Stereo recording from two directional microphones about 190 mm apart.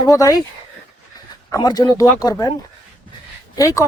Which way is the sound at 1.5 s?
20° left (ahead or behind).